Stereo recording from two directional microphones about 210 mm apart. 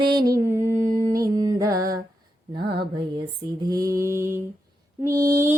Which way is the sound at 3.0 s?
20° right (ahead or behind).